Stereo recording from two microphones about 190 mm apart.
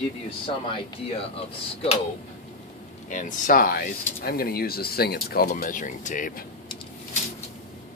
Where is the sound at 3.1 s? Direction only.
45° left (ahead or behind).